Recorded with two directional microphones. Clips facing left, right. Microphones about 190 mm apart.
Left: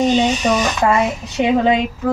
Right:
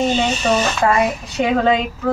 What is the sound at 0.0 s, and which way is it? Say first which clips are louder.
Speech: left 3 dB; 15° left (ahead or behind).